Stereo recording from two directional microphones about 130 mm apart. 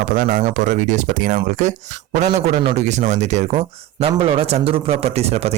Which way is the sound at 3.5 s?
45° right (ahead or behind).